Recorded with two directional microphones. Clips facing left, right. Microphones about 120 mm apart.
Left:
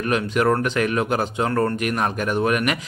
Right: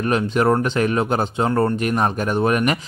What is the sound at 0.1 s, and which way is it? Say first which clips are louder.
Speech: right 1 dB; 30° right (ahead or behind).